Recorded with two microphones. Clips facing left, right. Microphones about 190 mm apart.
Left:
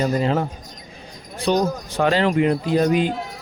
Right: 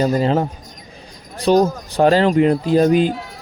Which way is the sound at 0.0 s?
35° right (ahead or behind).